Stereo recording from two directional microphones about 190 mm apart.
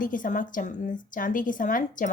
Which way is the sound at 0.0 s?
45° left (ahead or behind).